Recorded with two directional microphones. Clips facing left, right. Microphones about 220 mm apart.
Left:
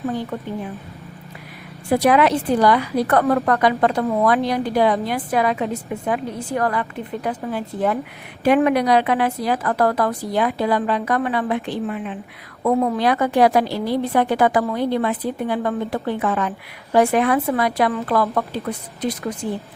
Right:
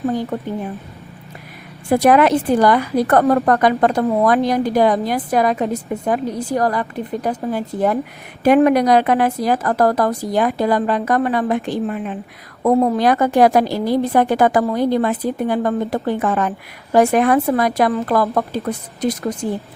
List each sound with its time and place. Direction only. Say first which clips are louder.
1.9 s a woman's voice: right 3 dB; 50° right (ahead or behind)